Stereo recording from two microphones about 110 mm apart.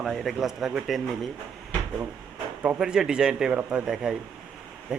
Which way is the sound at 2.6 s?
10° right (ahead or behind).